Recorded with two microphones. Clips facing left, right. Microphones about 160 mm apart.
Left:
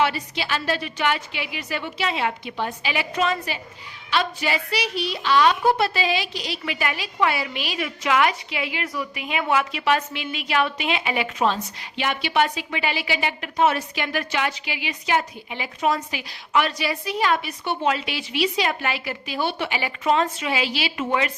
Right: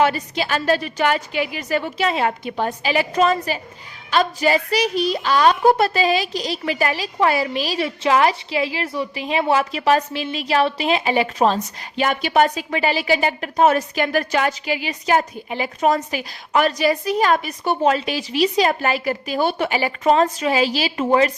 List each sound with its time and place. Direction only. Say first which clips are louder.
0.0 s a woman's voice: right 4 dB; 45° right (ahead or behind)